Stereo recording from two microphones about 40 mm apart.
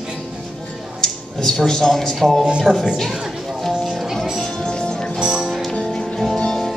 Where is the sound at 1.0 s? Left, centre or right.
Centre.